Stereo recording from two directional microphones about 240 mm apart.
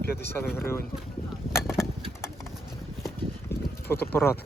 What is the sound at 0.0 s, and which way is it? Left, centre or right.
Speech, left.